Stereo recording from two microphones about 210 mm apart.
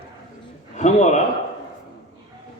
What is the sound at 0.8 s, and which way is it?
Speech, 35° left (ahead or behind).